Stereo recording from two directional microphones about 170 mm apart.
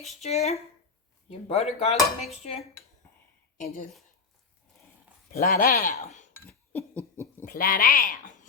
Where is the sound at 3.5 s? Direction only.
50° left (ahead or behind).